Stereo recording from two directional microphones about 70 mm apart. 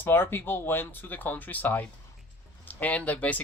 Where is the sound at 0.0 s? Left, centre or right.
Left.